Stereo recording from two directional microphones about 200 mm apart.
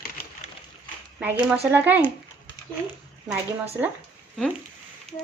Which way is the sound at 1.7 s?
10° right (ahead or behind).